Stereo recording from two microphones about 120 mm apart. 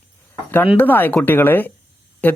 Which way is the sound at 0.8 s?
15° left (ahead or behind).